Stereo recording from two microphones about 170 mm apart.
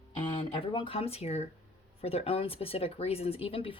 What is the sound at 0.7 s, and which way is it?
Speech, 30° left (ahead or behind).